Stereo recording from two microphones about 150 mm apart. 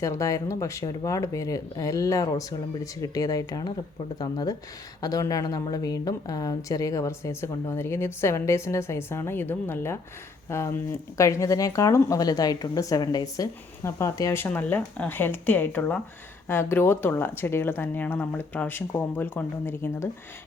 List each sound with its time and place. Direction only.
0.0 s speech: 20° left (ahead or behind)